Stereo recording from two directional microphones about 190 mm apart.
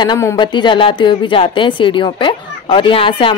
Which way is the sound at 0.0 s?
20° left (ahead or behind).